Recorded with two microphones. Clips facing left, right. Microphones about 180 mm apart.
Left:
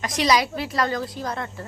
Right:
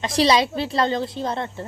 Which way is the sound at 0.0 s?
30° right (ahead or behind).